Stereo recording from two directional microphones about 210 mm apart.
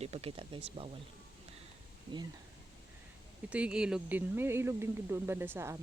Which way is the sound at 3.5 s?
5° right (ahead or behind).